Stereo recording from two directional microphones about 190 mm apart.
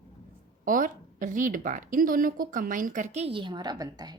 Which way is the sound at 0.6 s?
45° right (ahead or behind).